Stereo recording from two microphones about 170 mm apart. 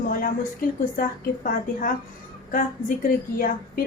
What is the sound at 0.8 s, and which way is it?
A woman's voice, 55° left (ahead or behind).